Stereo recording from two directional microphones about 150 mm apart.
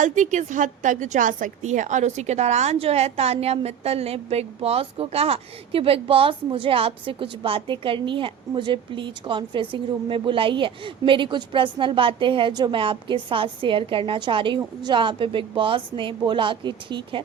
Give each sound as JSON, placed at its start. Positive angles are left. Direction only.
{"t": 0.0, "sound": "a woman's voice", "side_deg": -55}